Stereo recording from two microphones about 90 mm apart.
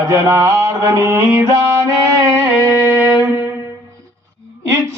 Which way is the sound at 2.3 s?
25° right (ahead or behind).